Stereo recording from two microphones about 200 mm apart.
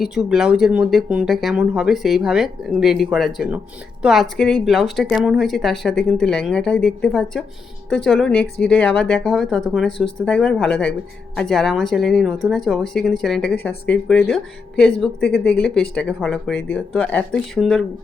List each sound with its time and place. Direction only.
0.0 s speech: 5° right (ahead or behind)